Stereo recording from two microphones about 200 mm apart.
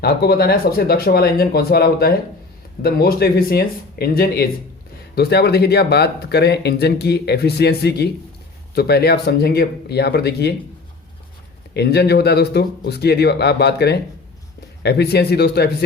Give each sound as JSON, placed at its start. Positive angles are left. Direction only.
{"t": 0.0, "sound": "speech", "side_deg": 55}
{"t": 11.7, "sound": "speech", "side_deg": 55}